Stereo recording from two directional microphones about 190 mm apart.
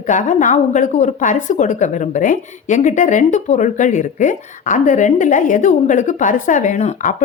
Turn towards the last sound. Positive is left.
turn(degrees=45)  # may be behind; listen again after turning